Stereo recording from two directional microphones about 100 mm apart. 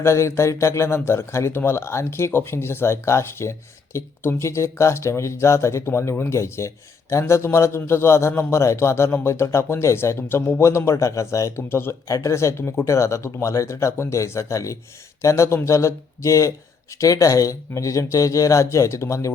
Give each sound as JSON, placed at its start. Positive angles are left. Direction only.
{"t": 0.0, "sound": "speech", "side_deg": 30}